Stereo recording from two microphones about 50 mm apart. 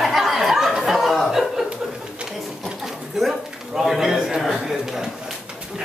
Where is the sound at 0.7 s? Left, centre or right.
Centre.